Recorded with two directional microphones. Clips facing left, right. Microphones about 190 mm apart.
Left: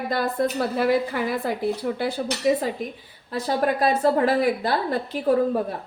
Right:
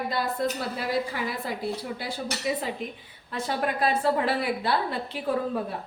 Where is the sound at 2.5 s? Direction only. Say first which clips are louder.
Left 8 dB; 45° left (ahead or behind).